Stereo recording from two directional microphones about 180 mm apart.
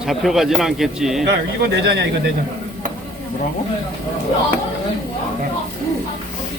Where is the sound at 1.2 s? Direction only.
70° right (ahead or behind).